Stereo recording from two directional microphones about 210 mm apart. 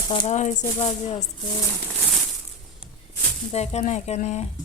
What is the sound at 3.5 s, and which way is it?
Speech, 30° left (ahead or behind).